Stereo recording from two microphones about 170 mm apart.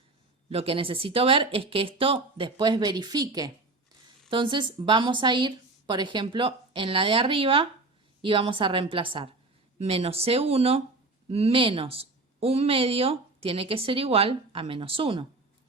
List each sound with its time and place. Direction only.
0.5 s speech: 35° right (ahead or behind)